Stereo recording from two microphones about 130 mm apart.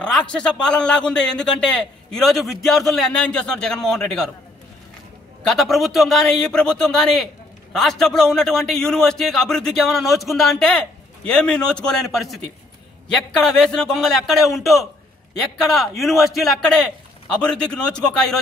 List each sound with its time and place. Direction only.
0.0 s a man's voice: 5° left (ahead or behind)
5.4 s a man's voice: 5° left (ahead or behind)